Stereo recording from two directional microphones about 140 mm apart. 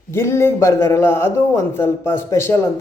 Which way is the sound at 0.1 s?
20° left (ahead or behind).